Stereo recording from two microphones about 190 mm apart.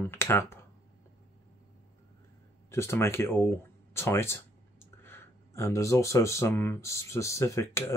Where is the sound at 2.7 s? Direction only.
15° left (ahead or behind).